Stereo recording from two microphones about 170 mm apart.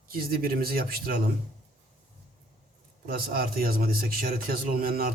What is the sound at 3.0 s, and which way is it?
A man's voice, 60° right (ahead or behind).